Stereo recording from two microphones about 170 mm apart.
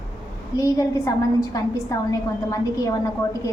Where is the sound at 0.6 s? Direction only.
20° left (ahead or behind).